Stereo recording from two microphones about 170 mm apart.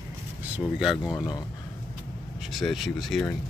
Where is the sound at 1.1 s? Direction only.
25° left (ahead or behind).